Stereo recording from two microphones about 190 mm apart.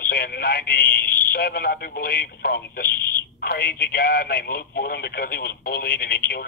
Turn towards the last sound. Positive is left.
turn(degrees=55)  # may be behind; listen again after turning